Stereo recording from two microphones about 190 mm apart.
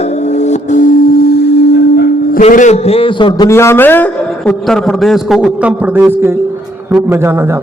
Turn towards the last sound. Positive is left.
turn(degrees=-10)  # may be behind; listen again after turning